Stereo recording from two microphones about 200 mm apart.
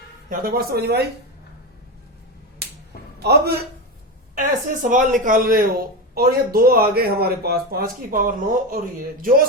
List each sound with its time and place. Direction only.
0.3 s speech: 45° right (ahead or behind)
3.2 s a man's voice: 55° right (ahead or behind)
4.4 s speech: 40° right (ahead or behind)